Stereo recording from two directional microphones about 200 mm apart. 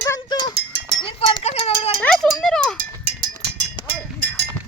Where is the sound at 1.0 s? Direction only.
30° left (ahead or behind).